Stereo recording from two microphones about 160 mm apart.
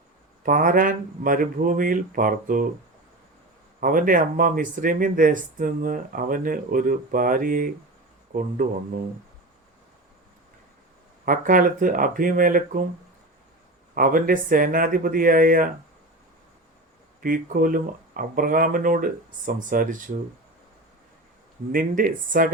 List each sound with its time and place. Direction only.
0.4 s speech: 60° right (ahead or behind)
3.8 s speech: 60° right (ahead or behind)
11.3 s speech: 60° right (ahead or behind)
13.9 s speech: 60° right (ahead or behind)
17.2 s speech: 60° right (ahead or behind)
21.7 s speech: 60° right (ahead or behind)